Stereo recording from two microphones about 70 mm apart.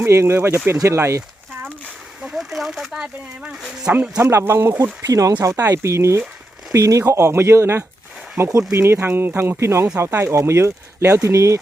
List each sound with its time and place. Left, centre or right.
0.0 s speech: right
2.2 s speech: centre
4.2 s speech: right
5.0 s speech: right